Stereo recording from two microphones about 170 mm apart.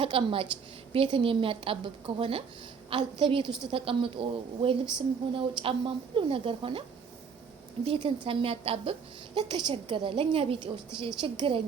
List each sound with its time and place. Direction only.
0.0 s a woman's voice: 30° right (ahead or behind)
7.9 s a woman's voice: 30° right (ahead or behind)